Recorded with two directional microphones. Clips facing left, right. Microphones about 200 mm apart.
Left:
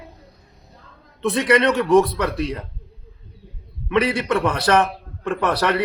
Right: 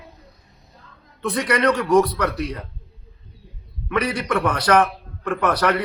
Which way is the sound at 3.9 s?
25° left (ahead or behind).